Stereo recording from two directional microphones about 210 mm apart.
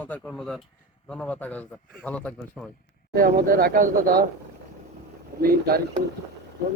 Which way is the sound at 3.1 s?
45° right (ahead or behind).